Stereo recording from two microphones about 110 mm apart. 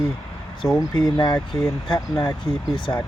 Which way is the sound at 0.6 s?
30° left (ahead or behind).